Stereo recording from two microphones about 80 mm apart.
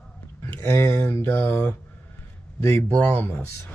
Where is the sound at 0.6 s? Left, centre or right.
Left.